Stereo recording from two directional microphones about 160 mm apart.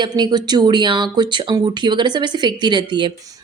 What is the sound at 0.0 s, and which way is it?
Speech, 25° right (ahead or behind).